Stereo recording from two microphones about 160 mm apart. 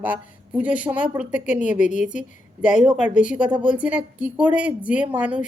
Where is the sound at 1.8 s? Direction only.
50° left (ahead or behind).